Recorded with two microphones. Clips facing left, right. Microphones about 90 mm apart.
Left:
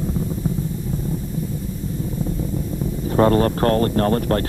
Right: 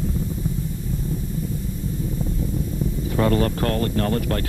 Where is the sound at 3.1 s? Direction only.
40° left (ahead or behind).